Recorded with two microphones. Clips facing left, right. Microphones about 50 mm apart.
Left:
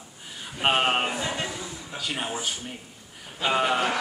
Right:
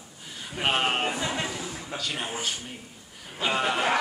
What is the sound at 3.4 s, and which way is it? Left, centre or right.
Speech, centre.